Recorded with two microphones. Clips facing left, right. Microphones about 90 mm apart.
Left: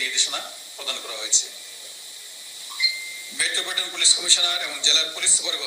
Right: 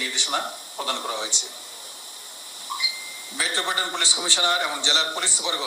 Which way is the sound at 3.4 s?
45° right (ahead or behind).